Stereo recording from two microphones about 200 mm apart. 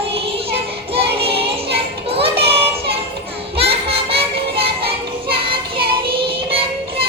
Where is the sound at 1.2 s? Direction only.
30° right (ahead or behind).